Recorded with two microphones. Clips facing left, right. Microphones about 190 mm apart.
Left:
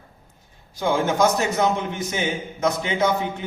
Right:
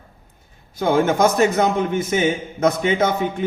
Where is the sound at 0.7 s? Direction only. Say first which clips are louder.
Right 4 dB; 55° right (ahead or behind).